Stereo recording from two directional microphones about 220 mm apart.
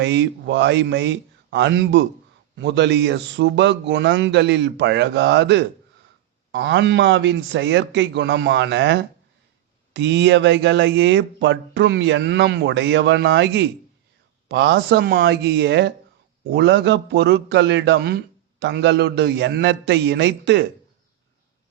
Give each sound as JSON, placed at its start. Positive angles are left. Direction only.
{"t": 0.0, "sound": "speech", "side_deg": -55}